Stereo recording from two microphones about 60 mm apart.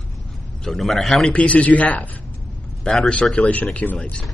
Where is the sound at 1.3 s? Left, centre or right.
Left.